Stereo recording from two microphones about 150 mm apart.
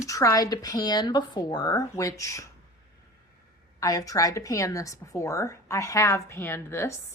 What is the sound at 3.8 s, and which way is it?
A woman's voice, 25° left (ahead or behind).